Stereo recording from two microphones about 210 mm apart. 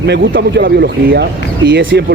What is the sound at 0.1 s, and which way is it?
Speech, 50° right (ahead or behind).